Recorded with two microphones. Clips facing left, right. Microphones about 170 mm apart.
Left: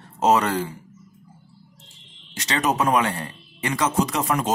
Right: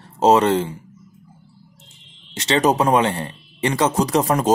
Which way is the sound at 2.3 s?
25° right (ahead or behind).